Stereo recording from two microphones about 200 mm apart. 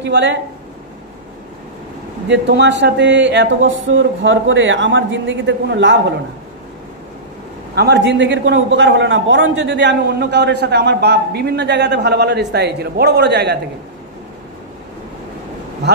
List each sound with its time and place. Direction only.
0.0 s a man's voice: 60° right (ahead or behind)
2.2 s a man's voice: 60° right (ahead or behind)
7.7 s a man's voice: 55° right (ahead or behind)